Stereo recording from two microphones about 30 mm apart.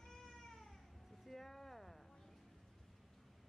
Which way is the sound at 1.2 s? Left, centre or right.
Centre.